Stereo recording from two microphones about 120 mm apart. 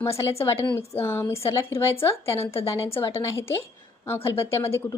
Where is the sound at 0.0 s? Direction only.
25° left (ahead or behind).